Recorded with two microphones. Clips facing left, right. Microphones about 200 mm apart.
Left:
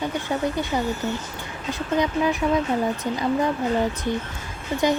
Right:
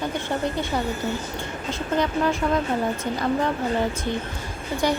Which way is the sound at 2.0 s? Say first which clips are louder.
Left 1 dB; 15° left (ahead or behind).